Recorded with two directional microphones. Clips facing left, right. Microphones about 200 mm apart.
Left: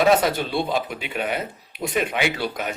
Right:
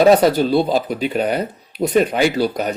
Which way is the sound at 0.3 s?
35° right (ahead or behind).